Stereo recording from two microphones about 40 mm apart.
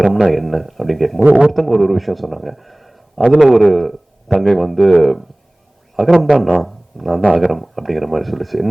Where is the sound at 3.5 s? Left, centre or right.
Centre.